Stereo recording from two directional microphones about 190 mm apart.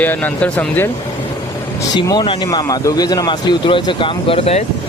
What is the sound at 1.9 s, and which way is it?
Speech, 20° left (ahead or behind).